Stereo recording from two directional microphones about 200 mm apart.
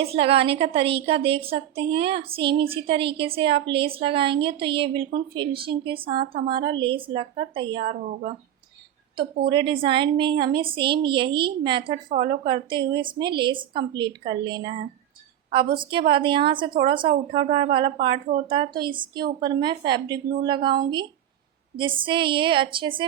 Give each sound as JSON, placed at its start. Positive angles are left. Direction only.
{"t": 0.0, "sound": "a woman's voice", "side_deg": -30}
{"t": 9.5, "sound": "a woman's voice", "side_deg": -25}